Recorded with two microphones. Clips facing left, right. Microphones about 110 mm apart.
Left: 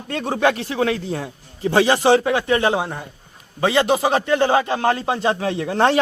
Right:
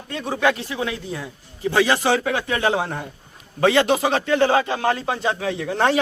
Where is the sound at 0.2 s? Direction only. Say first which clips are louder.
Left 2 dB; 30° left (ahead or behind).